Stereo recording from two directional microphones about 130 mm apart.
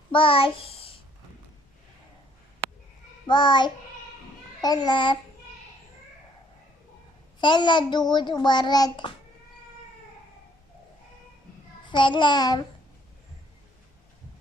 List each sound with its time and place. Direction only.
0.1 s a child's voice: 45° left (ahead or behind)
3.3 s a child's voice: 35° left (ahead or behind)
7.3 s a child's voice: 35° left (ahead or behind)
11.9 s a child's voice: 35° left (ahead or behind)